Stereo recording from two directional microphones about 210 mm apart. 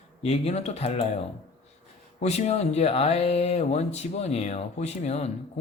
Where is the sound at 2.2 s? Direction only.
30° left (ahead or behind).